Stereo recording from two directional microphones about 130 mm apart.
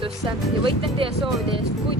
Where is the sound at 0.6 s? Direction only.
45° right (ahead or behind).